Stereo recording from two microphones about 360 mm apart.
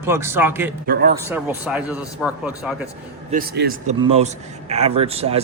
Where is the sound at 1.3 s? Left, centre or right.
Centre.